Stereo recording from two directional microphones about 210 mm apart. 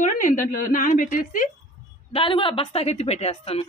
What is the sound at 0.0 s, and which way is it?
A woman's voice, 40° left (ahead or behind).